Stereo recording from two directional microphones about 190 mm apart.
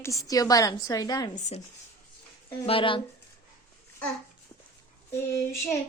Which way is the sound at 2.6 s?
30° left (ahead or behind).